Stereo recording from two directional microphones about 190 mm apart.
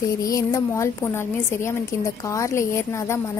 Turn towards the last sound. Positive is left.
turn(degrees=15)  # may be behind; listen again after turning